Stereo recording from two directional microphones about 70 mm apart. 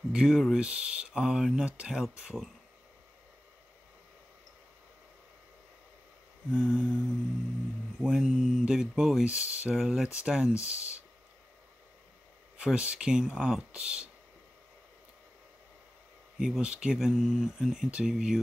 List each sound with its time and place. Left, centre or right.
0.1 s speech: centre
0.6 s speech: centre
6.5 s speech: centre
9.2 s speech: centre
12.5 s speech: centre
16.3 s speech: centre